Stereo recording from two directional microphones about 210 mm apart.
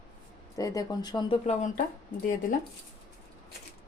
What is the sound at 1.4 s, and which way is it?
Speech, 35° left (ahead or behind).